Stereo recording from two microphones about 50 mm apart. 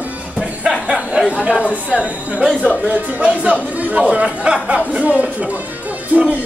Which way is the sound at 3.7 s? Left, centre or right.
Right.